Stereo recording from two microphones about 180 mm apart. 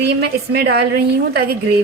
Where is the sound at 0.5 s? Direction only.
60° right (ahead or behind).